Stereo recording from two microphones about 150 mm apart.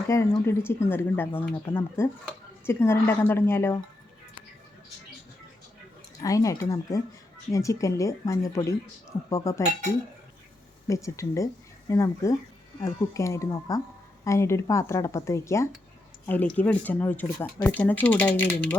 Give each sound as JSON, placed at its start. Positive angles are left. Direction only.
{"t": 0.1, "sound": "speech", "side_deg": 20}
{"t": 6.1, "sound": "speech", "side_deg": 20}
{"t": 10.8, "sound": "speech", "side_deg": 20}